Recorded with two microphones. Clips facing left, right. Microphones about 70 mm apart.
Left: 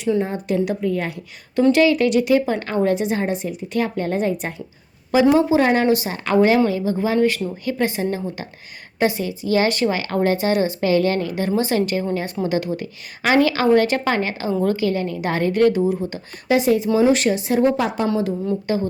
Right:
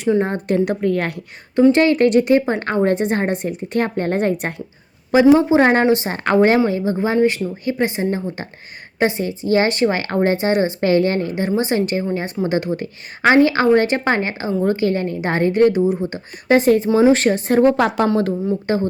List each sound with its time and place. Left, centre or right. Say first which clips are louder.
0.2 s speech: right 3 dB; right
1.7 s a woman's voice: right 2 dB; right
5.5 s a woman's voice: right 3 dB; right
5.8 s a woman's voice: right 2 dB; right
16.5 s speech: right 3 dB; right
18.7 s a woman's voice: right 2 dB; right